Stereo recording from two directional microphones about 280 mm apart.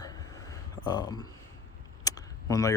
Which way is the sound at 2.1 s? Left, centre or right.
Centre.